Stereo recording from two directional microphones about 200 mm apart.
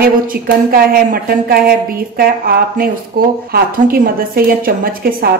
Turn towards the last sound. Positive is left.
turn(degrees=-45)  # may be behind; listen again after turning